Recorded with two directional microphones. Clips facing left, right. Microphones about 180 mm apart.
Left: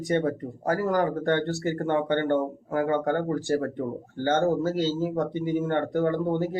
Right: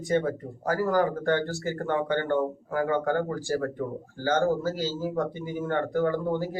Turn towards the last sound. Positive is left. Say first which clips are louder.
# left 2 dB
turn(degrees=25)  # may be behind; listen again after turning